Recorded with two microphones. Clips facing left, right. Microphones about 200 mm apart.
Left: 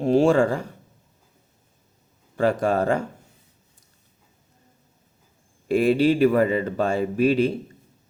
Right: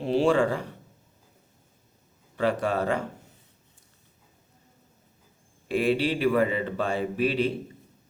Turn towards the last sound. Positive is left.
turn(degrees=45)  # may be behind; listen again after turning